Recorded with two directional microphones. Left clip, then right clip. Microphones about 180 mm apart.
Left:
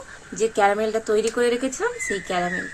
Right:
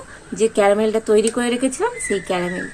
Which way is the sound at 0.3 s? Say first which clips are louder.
Right 4 dB; 40° right (ahead or behind).